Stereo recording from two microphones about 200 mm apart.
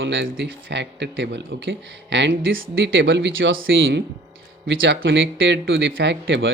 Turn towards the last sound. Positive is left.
turn(degrees=-65)  # may be behind; listen again after turning